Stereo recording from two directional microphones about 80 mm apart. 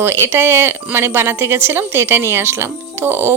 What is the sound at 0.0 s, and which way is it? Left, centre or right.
A woman's voice, right.